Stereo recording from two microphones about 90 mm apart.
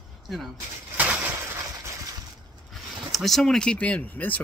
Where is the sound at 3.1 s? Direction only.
Centre (ahead or behind).